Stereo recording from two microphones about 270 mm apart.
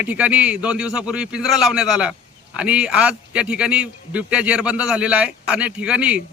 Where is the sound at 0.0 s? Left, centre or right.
Centre.